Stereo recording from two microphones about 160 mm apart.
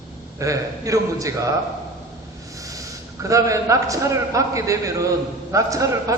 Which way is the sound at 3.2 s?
20° right (ahead or behind).